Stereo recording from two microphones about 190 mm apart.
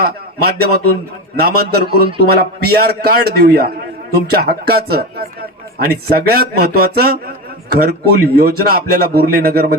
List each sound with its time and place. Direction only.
0.0 s a man's voice: 55° right (ahead or behind)